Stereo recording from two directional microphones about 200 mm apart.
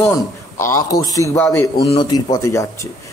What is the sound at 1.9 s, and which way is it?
Speech, 20° left (ahead or behind).